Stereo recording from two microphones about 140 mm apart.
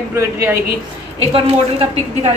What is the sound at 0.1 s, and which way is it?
Speech, 20° right (ahead or behind).